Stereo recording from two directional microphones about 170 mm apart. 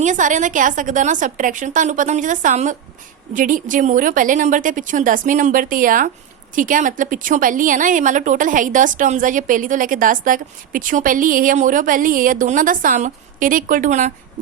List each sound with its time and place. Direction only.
0.0 s a woman's voice: 45° right (ahead or behind)